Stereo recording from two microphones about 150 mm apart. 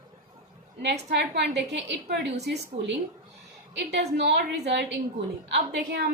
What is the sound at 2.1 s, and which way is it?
Speech, 90° right.